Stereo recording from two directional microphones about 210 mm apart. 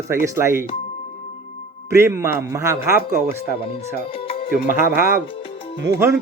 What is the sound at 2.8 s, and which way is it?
Speech, 45° left (ahead or behind).